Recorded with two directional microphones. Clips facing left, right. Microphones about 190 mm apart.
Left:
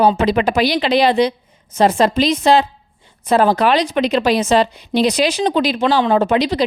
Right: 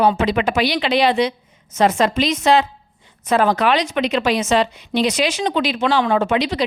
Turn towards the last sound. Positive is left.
turn(degrees=35)  # may be behind; listen again after turning